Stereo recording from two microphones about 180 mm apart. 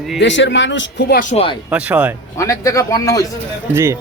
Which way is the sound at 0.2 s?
85° left.